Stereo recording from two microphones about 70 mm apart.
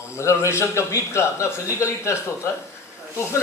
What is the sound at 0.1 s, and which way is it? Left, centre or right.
A man's voice, left.